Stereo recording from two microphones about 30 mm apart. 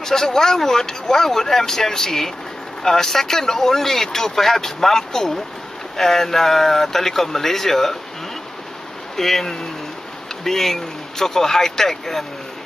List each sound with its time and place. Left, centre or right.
0.0 s speech: centre
9.1 s speech: centre